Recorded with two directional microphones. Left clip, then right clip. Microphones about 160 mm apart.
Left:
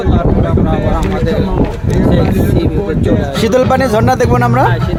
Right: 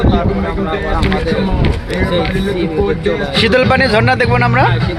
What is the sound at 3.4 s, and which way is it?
Speech, 25° left (ahead or behind).